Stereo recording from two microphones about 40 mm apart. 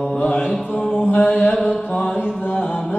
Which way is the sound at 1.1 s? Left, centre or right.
Left.